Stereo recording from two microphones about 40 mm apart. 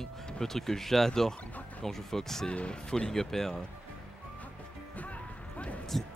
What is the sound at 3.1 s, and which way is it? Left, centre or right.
Speech, centre.